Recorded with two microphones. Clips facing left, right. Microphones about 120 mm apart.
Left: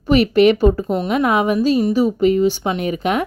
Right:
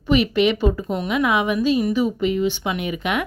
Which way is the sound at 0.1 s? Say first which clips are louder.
Left 5 dB; 45° left (ahead or behind).